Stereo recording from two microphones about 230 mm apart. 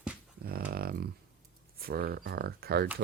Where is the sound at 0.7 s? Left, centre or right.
Right.